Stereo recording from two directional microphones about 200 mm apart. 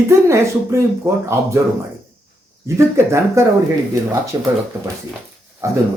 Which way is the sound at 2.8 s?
15° right (ahead or behind).